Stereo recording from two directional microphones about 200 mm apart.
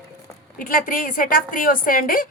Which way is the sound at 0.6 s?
45° left (ahead or behind).